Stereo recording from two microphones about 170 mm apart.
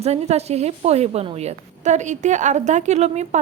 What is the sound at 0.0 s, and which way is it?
A woman's voice, 40° right (ahead or behind).